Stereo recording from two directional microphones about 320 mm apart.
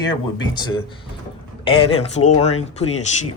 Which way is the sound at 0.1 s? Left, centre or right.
Centre.